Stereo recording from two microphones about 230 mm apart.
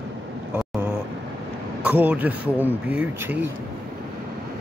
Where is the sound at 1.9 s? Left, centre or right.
Centre.